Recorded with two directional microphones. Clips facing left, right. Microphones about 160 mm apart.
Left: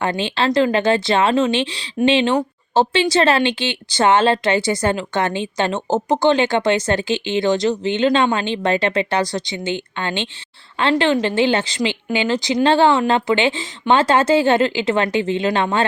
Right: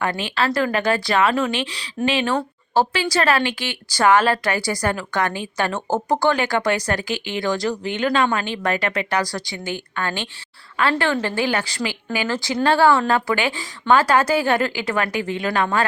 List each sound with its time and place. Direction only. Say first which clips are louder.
0.0 s speech: left 3 dB; 25° left (ahead or behind)